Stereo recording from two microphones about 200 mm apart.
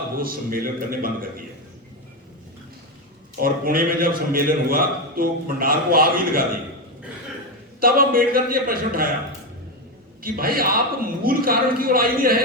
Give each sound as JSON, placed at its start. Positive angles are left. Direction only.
{"t": 0.2, "sound": "a man's voice", "side_deg": -45}
{"t": 3.4, "sound": "a man's voice", "side_deg": -45}
{"t": 7.8, "sound": "a man's voice", "side_deg": -45}
{"t": 10.2, "sound": "a man's voice", "side_deg": -50}